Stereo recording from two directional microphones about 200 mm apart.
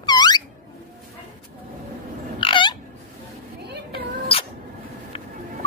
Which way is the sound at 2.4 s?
25° left (ahead or behind).